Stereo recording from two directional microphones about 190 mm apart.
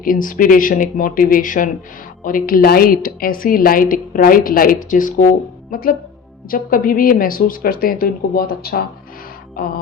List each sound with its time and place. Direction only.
0.0 s a woman's voice: 45° left (ahead or behind)